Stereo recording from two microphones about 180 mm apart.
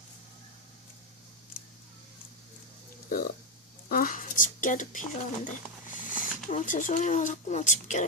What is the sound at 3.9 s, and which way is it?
Speech, 50° left (ahead or behind).